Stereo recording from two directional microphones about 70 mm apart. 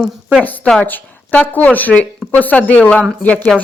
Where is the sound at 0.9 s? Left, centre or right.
Left.